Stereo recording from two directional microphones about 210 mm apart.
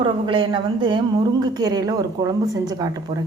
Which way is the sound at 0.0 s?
25° right (ahead or behind).